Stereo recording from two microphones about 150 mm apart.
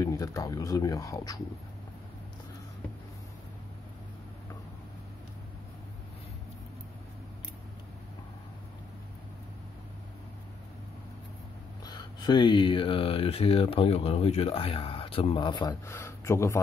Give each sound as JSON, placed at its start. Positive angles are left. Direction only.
{"t": 0.0, "sound": "speech", "side_deg": 20}
{"t": 11.8, "sound": "speech", "side_deg": 30}
{"t": 15.9, "sound": "speech", "side_deg": 15}